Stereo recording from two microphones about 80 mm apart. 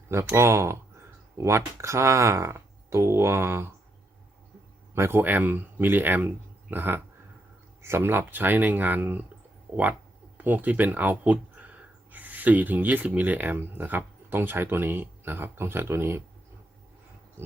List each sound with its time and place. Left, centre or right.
0.1 s speech: right
4.9 s speech: right